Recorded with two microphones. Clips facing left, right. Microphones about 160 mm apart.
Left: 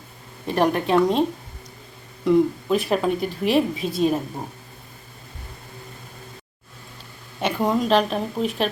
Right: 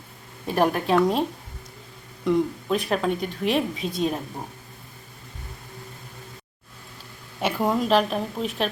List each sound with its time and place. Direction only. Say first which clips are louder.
0.4 s a woman's voice: left 1 dB; 5° right (ahead or behind)
2.2 s a woman's voice: left 4 dB; centre (ahead or behind)
7.3 s a woman's voice: left 2 dB; 5° right (ahead or behind)